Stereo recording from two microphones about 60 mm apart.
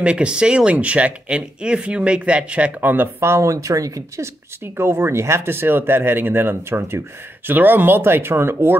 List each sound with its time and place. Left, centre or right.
0.0 s speech: centre
2.8 s speech: right
3.2 s speech: right
4.7 s speech: right